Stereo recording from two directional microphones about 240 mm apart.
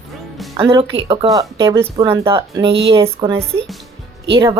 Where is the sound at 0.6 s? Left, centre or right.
Right.